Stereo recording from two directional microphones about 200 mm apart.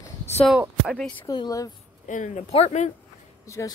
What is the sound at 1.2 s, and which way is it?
Speech, 20° left (ahead or behind).